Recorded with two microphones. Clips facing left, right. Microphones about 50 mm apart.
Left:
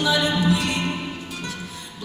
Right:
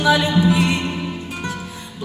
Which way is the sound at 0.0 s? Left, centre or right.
Right.